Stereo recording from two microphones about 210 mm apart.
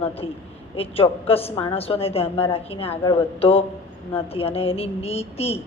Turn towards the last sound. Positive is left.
turn(degrees=30)  # may be behind; listen again after turning